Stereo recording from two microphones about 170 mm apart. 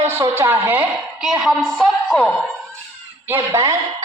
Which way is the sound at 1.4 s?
Centre (ahead or behind).